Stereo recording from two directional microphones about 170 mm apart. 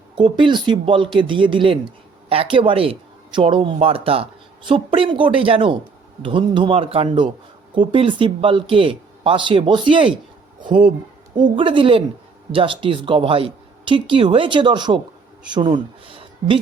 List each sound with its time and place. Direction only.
0.2 s speech: 30° right (ahead or behind)
10.7 s speech: 55° right (ahead or behind)
11.5 s speech: 30° right (ahead or behind)